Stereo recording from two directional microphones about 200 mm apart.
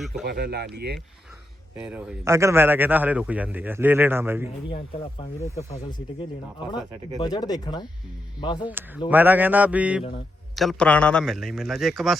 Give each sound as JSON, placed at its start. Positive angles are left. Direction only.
{"t": 0.3, "sound": "speech", "side_deg": -55}
{"t": 1.8, "sound": "a man's voice", "side_deg": -10}
{"t": 5.4, "sound": "speech", "side_deg": 15}
{"t": 7.2, "sound": "speech", "side_deg": 20}
{"t": 9.0, "sound": "a man's voice", "side_deg": -10}